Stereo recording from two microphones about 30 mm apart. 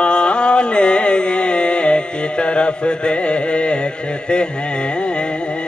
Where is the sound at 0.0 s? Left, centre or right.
Left.